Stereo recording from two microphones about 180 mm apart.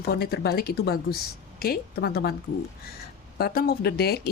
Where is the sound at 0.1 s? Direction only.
60° left (ahead or behind).